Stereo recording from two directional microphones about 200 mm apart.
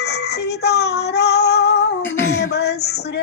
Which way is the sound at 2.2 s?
55° left (ahead or behind).